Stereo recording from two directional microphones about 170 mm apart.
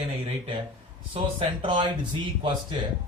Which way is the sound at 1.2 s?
35° right (ahead or behind).